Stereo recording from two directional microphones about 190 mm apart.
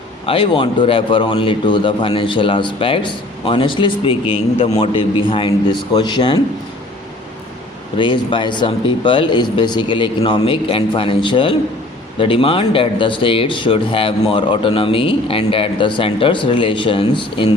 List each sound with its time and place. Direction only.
0.3 s speech: 25° left (ahead or behind)
7.9 s speech: 25° left (ahead or behind)